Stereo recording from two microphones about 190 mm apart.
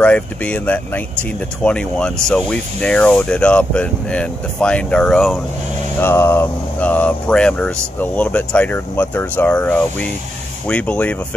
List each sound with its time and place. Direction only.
0.0 s speech: 5° left (ahead or behind)
5.9 s speech: 10° left (ahead or behind)